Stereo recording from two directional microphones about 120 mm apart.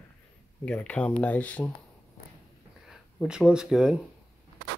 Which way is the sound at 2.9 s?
5° right (ahead or behind).